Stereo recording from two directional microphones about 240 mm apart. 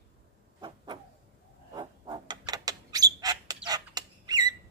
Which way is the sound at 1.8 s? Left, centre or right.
Centre.